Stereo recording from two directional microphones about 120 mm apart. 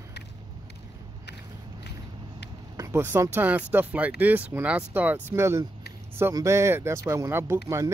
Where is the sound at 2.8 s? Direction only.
20° right (ahead or behind).